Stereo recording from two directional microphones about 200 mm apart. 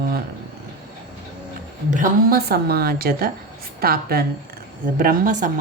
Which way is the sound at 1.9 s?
45° right (ahead or behind).